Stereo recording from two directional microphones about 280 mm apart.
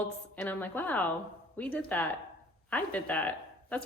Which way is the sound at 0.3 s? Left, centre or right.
Centre.